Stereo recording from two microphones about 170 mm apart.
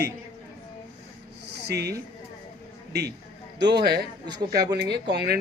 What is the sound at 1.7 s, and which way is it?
A man's voice, 75° right (ahead or behind).